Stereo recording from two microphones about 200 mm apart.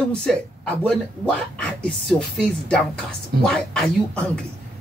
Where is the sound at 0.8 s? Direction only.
5° left (ahead or behind).